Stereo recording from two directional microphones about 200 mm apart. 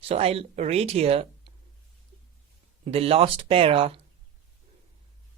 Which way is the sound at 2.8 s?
30° right (ahead or behind).